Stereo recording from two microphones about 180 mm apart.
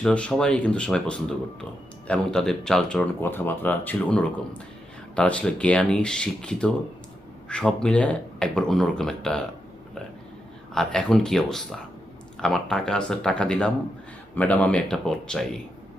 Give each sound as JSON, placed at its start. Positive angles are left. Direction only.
{"t": 0.0, "sound": "speech", "side_deg": 5}
{"t": 10.8, "sound": "speech", "side_deg": 5}